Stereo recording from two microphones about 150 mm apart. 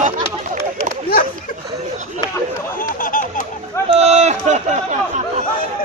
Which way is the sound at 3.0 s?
60° left (ahead or behind).